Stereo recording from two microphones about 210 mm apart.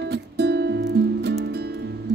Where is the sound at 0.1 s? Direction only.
50° right (ahead or behind).